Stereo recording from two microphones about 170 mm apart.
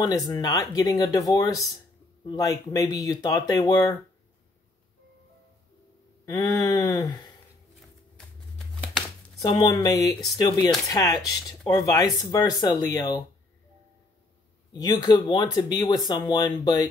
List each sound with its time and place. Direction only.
0.3 s speech: 20° left (ahead or behind)
6.3 s speech: 20° left (ahead or behind)
8.2 s a sound: centre (ahead or behind)
9.4 s speech: 25° left (ahead or behind)
14.7 s speech: 25° left (ahead or behind)